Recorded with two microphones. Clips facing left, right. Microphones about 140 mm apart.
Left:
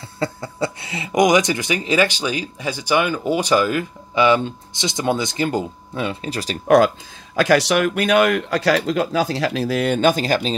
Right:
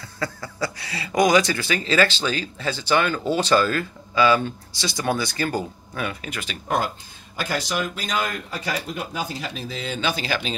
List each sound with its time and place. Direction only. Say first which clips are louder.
0.2 s speech: left 5 dB; 25° left (ahead or behind)
7.3 s speech: left 10 dB; 85° left; by 10.5 s 40° left (ahead or behind)